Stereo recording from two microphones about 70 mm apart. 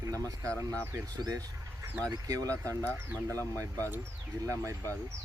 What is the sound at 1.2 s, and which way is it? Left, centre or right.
Speech, right.